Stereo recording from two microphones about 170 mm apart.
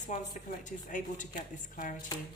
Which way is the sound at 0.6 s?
50° left (ahead or behind).